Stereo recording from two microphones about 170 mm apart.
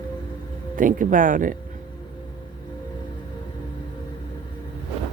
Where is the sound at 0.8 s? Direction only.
50° right (ahead or behind).